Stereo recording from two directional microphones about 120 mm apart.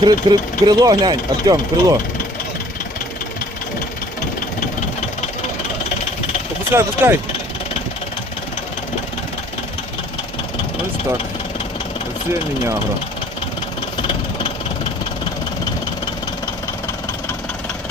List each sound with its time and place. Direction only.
0.0 s speech: 35° right (ahead or behind)
6.7 s speech: 20° right (ahead or behind)